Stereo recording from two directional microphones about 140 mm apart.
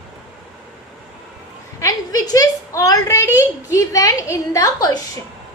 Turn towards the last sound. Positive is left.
turn(degrees=25)  # may be behind; listen again after turning